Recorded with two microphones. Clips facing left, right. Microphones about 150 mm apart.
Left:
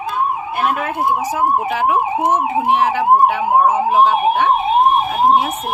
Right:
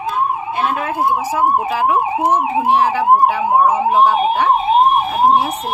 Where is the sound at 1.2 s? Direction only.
30° right (ahead or behind).